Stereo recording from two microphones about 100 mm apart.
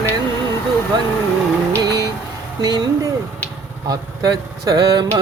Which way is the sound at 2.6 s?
45° right (ahead or behind).